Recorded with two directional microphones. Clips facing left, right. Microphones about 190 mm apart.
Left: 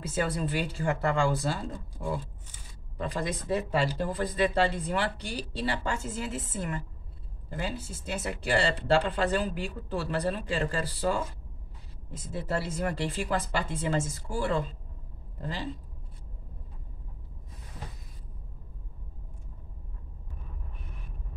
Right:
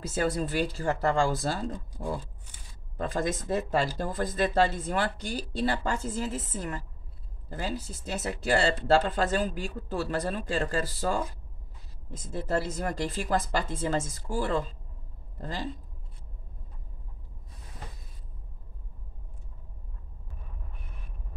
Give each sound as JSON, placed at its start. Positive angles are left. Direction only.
{"t": 0.2, "sound": "speech", "side_deg": -40}